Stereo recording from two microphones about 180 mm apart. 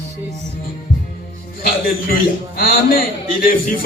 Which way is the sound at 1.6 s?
55° left (ahead or behind).